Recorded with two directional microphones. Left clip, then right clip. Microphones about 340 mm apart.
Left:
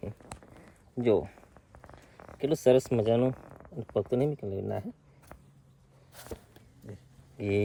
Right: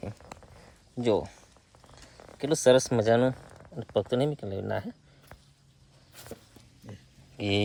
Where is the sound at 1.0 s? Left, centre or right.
Centre.